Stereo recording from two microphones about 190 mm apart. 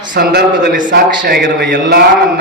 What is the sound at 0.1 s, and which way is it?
A man's voice, 55° right (ahead or behind).